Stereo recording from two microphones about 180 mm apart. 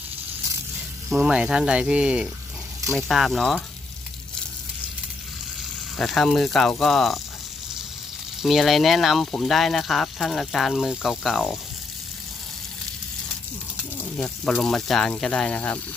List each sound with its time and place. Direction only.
1.1 s speech: 5° right (ahead or behind)
6.0 s speech: centre (ahead or behind)
8.4 s speech: centre (ahead or behind)
14.0 s speech: 5° left (ahead or behind)